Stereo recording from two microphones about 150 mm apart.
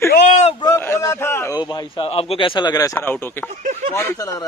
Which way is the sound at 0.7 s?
15° left (ahead or behind).